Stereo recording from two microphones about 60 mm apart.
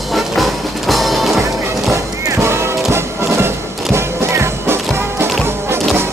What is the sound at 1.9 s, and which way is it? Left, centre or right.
Music, right.